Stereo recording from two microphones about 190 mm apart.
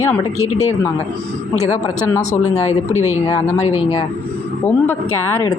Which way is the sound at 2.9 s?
15° right (ahead or behind).